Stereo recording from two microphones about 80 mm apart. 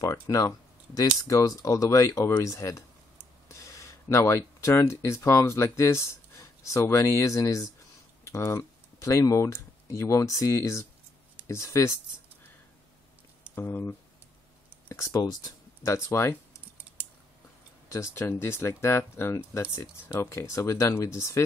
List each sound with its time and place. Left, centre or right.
0.0 s speech: left
13.6 s speech: left
15.9 s speech: left
17.8 s speech: left